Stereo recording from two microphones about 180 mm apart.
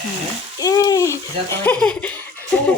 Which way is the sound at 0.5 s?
20° left (ahead or behind).